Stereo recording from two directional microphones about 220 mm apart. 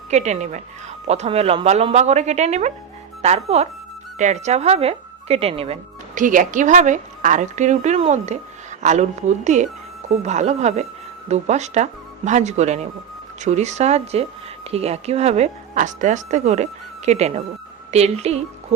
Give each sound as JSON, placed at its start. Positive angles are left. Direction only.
{"t": 0.1, "sound": "speech", "side_deg": -30}